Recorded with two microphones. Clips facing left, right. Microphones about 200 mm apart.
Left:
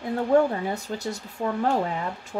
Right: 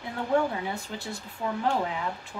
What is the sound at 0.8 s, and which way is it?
Speech, 40° left (ahead or behind).